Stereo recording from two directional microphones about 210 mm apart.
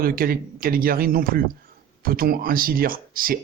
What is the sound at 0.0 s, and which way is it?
Speech, 45° right (ahead or behind).